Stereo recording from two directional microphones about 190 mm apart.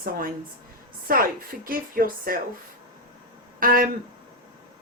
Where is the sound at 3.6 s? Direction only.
50° right (ahead or behind).